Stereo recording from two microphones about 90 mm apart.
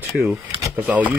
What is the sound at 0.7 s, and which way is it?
Speech, 15° right (ahead or behind).